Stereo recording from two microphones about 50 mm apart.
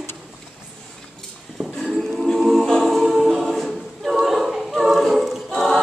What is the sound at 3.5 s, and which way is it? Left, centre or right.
A capella, centre.